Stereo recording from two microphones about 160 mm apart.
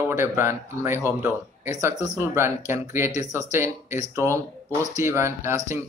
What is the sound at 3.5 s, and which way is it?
A man's voice, 15° right (ahead or behind).